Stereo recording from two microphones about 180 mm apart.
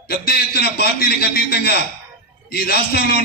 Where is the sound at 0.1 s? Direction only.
60° left (ahead or behind).